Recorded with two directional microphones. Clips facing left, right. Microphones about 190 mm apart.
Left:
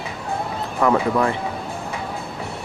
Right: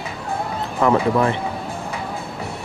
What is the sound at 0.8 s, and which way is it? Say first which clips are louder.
Speech: right 1 dB; 25° right (ahead or behind).